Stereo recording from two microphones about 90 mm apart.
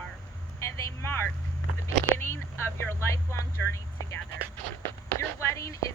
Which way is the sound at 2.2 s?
25° left (ahead or behind).